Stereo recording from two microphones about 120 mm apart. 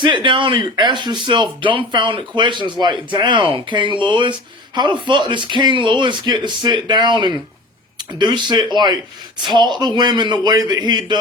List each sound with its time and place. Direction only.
0.0 s speech: 40° right (ahead or behind)